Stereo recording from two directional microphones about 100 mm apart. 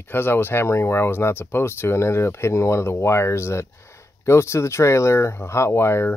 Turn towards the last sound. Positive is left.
turn(degrees=25)  # may be behind; listen again after turning